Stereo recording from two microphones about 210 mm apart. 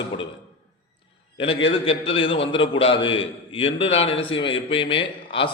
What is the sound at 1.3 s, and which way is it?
A man's voice, 25° left (ahead or behind).